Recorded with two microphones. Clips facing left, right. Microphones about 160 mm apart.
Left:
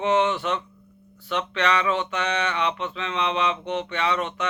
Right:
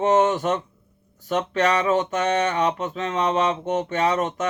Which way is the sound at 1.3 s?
40° right (ahead or behind).